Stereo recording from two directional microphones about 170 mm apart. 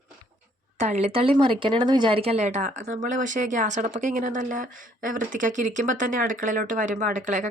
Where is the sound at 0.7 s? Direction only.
45° right (ahead or behind).